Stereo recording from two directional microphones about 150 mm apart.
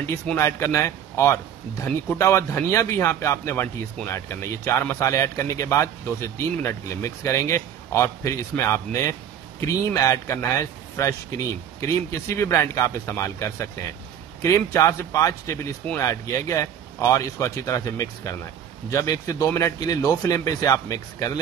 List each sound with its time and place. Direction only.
0.4 s speech: 20° left (ahead or behind)
12.3 s speech: 20° left (ahead or behind)